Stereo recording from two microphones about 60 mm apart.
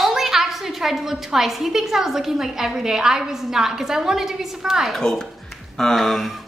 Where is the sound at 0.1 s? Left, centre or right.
Centre.